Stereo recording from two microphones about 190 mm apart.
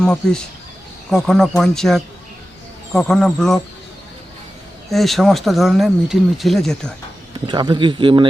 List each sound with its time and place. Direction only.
0.0 s speech: 5° left (ahead or behind)
4.9 s speech: centre (ahead or behind)
7.4 s speech: 25° right (ahead or behind)